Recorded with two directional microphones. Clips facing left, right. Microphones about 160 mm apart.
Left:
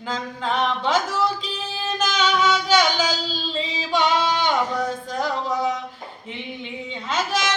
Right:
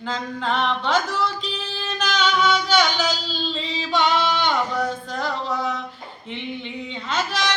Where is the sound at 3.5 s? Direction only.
10° left (ahead or behind).